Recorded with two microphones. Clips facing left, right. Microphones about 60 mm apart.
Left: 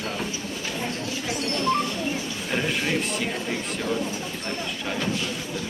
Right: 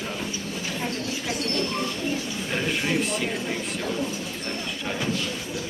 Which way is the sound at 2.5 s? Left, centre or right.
Centre.